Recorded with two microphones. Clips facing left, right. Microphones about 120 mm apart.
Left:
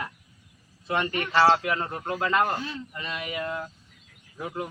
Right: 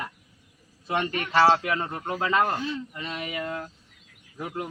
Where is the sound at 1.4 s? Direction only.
Centre (ahead or behind).